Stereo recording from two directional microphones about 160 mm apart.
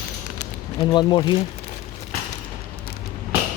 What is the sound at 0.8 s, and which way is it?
Speech, 30° left (ahead or behind).